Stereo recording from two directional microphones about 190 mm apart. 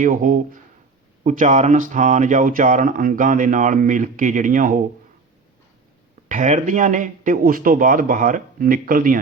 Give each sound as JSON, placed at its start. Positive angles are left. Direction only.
{"t": 0.0, "sound": "a man's voice", "side_deg": -45}
{"t": 6.2, "sound": "a man's voice", "side_deg": -40}